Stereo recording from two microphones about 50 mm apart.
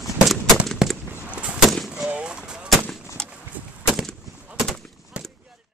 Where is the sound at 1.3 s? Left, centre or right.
Right.